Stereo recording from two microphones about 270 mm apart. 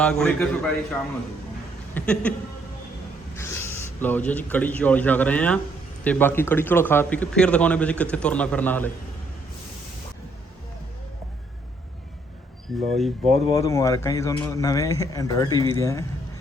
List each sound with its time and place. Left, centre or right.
0.0 s a man's voice: centre
2.0 s a man's voice: centre
3.3 s a man's voice: centre
12.7 s a man's voice: centre
13.6 s speech: centre